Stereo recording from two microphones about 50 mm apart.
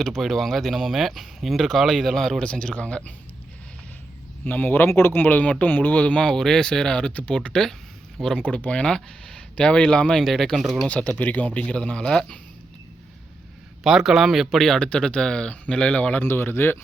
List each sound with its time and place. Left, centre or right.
0.0 s speech: centre
2.4 s speech: centre
4.4 s speech: left; by 7.1 s centre
7.1 s speech: left
7.3 s speech: centre
8.4 s speech: left; by 10.8 s centre
10.8 s speech: left
11.8 s speech: centre
13.8 s speech: centre
14.6 s speech: centre
16.2 s speech: left